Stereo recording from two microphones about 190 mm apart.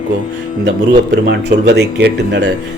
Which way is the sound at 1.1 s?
65° right (ahead or behind).